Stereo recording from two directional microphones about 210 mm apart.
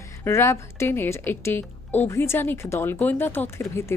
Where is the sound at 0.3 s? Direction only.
10° left (ahead or behind).